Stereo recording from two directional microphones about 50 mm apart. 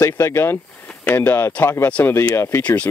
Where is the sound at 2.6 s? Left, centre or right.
Left.